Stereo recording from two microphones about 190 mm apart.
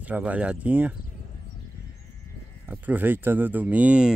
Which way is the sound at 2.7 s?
10° right (ahead or behind).